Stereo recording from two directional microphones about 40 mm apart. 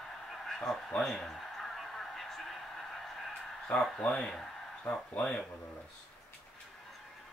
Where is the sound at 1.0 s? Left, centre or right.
Centre.